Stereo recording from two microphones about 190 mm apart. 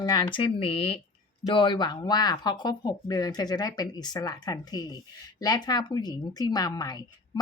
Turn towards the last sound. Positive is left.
turn(degrees=20)  # may be behind; listen again after turning